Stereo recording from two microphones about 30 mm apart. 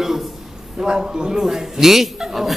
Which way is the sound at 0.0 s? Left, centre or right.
Centre.